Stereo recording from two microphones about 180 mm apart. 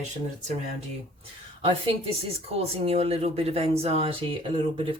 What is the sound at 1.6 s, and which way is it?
Speech, 30° right (ahead or behind).